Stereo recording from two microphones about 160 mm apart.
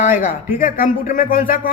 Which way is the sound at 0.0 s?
55° left (ahead or behind).